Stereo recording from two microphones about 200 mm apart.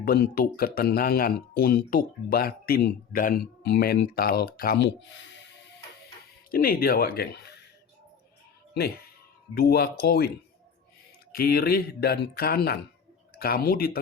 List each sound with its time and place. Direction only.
0.0 s speech: 50° left (ahead or behind)
6.5 s speech: 45° left (ahead or behind)
9.6 s speech: 50° left (ahead or behind)
11.3 s speech: 50° left (ahead or behind)